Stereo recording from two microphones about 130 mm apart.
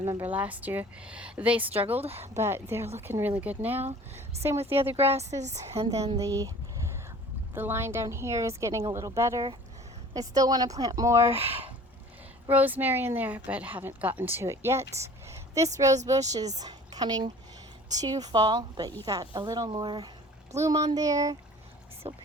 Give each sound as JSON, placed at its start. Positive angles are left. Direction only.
{"t": 0.2, "sound": "a woman's voice", "side_deg": -10}
{"t": 2.0, "sound": "speech", "side_deg": -50}
{"t": 2.3, "sound": "a woman's voice", "side_deg": -20}
{"t": 4.6, "sound": "speech", "side_deg": -45}
{"t": 6.1, "sound": "a woman's voice", "side_deg": -25}
{"t": 7.5, "sound": "a woman's voice", "side_deg": -20}
{"t": 11.4, "sound": "speech", "side_deg": -45}
{"t": 12.5, "sound": "a woman's voice", "side_deg": -15}
{"t": 22.0, "sound": "speech", "side_deg": -50}